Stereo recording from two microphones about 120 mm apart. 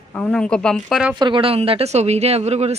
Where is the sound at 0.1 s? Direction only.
10° left (ahead or behind).